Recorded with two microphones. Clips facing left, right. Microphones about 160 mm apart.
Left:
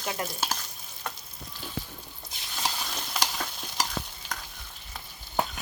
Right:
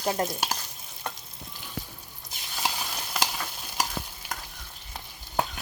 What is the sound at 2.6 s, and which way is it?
Stir, 5° right (ahead or behind).